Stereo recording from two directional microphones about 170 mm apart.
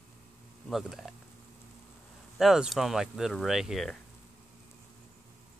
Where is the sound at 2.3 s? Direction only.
Centre (ahead or behind).